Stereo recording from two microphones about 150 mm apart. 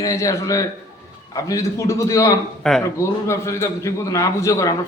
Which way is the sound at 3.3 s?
20° left (ahead or behind).